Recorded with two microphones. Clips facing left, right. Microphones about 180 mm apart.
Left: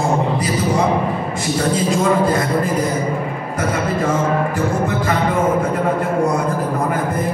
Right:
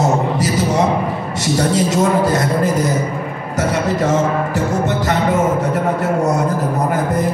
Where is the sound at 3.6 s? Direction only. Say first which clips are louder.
Right 3 dB; 80° right.